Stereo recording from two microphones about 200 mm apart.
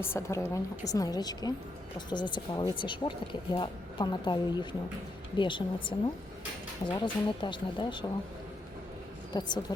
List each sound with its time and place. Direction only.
0.0 s a woman's voice: 15° left (ahead or behind)
9.3 s a woman's voice: 20° left (ahead or behind)